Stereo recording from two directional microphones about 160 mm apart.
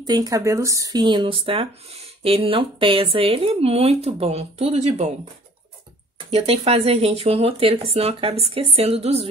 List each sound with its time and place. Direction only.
0.0 s speech: 25° right (ahead or behind); by 5.1 s 45° right (ahead or behind)
6.1 s speech: 40° right (ahead or behind)